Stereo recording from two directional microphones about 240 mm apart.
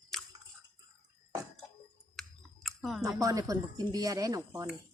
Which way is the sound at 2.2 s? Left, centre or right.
Centre.